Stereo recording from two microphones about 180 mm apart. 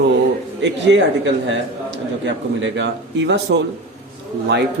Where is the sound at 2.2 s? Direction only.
85° right.